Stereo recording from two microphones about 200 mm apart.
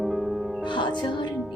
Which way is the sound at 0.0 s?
Centre (ahead or behind).